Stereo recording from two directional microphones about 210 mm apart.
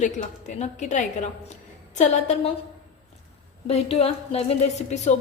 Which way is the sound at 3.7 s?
30° left (ahead or behind).